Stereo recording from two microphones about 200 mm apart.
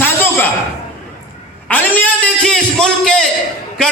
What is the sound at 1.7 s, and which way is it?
A man's voice, 10° left (ahead or behind).